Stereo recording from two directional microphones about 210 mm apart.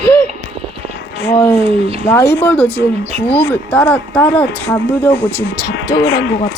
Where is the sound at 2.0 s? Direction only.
10° left (ahead or behind).